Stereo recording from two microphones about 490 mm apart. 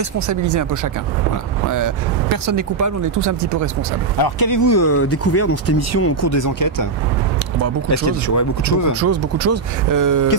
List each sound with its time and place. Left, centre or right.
0.3 s speech: right
4.2 s speech: left
4.6 s speech: left
7.9 s speech: left
9.0 s speech: right